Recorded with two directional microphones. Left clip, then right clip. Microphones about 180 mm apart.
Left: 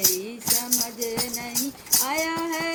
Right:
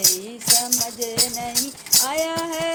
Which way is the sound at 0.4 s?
50° right (ahead or behind).